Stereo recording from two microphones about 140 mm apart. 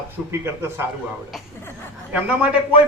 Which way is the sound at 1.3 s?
Centre (ahead or behind).